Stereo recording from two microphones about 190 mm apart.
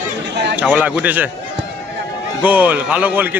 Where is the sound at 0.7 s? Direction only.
10° right (ahead or behind).